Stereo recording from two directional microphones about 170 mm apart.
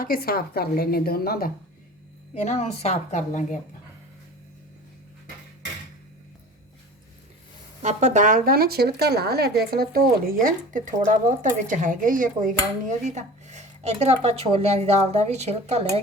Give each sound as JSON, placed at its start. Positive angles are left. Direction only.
{"t": 0.0, "sound": "a woman's voice", "side_deg": 60}
{"t": 2.3, "sound": "a woman's voice", "side_deg": 40}
{"t": 7.8, "sound": "speech", "side_deg": -45}